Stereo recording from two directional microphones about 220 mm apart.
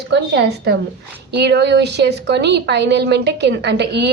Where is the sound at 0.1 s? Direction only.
50° right (ahead or behind).